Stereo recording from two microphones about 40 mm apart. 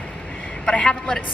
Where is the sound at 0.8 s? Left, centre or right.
Left.